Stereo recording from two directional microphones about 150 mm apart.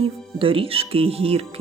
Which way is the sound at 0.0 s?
35° right (ahead or behind).